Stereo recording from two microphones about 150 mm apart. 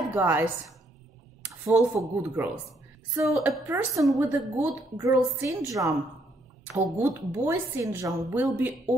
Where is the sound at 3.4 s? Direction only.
15° right (ahead or behind).